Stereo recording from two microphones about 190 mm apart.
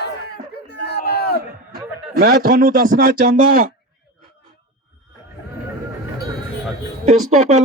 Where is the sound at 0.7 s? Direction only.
55° left (ahead or behind).